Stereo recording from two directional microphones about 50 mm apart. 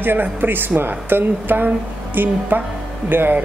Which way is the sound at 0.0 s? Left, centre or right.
Right.